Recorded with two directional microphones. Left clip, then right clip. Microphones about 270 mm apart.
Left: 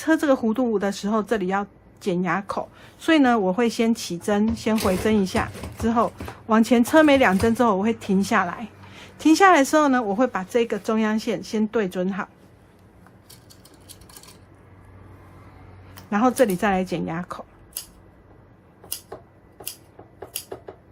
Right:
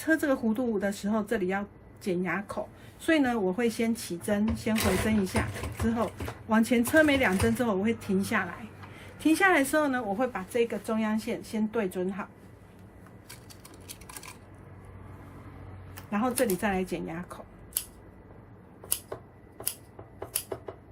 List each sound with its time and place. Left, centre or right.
0.0 s a woman's voice: centre
16.0 s a woman's voice: left